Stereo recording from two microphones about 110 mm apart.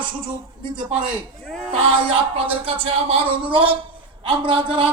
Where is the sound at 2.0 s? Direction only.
55° right (ahead or behind).